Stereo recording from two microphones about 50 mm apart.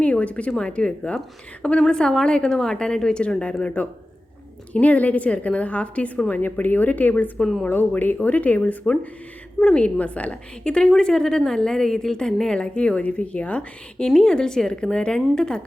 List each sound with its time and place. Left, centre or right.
0.0 s a woman's voice: left
6.4 s speech: left
7.3 s a woman's voice: centre
7.7 s speech: left
9.7 s a woman's voice: left
14.1 s a woman's voice: centre